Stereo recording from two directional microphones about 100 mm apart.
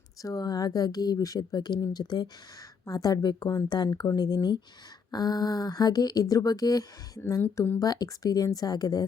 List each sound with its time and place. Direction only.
0.2 s speech: 35° left (ahead or behind)